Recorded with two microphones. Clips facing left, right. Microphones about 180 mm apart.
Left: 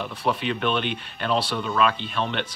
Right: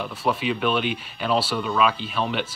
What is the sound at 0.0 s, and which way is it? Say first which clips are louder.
Speech: right 1 dB; centre (ahead or behind).